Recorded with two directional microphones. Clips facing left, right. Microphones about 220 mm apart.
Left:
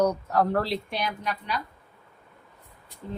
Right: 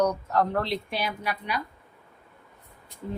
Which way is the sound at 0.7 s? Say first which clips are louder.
Even; centre (ahead or behind).